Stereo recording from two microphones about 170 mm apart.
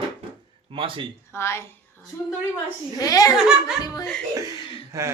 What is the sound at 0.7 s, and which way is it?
Speech, 30° right (ahead or behind).